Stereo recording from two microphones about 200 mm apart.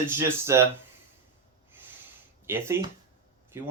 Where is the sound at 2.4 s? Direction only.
10° right (ahead or behind).